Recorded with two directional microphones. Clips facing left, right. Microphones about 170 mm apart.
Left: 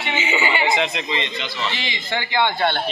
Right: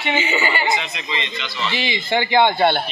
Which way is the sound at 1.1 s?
50° left (ahead or behind).